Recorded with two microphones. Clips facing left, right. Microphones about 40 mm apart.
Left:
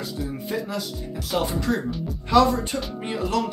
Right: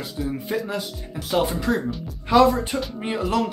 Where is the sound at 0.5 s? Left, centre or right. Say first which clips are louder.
Right 2 dB; centre.